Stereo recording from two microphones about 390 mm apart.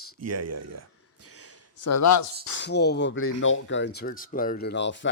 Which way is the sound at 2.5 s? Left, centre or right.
Left.